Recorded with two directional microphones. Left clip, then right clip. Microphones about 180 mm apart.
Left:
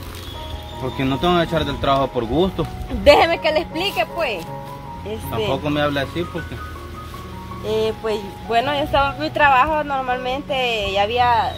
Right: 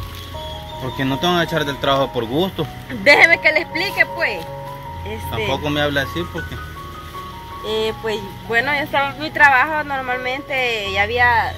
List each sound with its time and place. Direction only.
0.9 s speech: 20° right (ahead or behind)
3.0 s speech: 25° left (ahead or behind)
5.5 s speech: 25° right (ahead or behind)
7.6 s speech: 20° left (ahead or behind)